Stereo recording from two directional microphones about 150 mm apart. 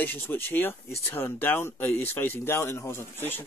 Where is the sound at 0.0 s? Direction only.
15° left (ahead or behind).